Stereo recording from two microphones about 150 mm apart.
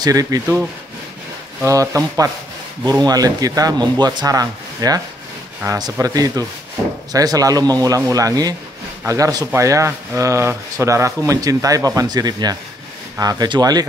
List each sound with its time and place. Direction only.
0.0 s speech: 25° right (ahead or behind)